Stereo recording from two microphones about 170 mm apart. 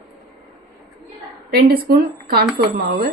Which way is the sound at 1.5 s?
65° right (ahead or behind).